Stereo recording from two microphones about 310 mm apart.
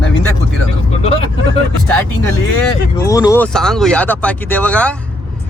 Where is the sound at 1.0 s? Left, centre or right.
Centre.